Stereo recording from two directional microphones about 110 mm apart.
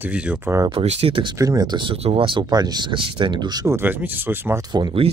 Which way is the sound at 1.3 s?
30° right (ahead or behind).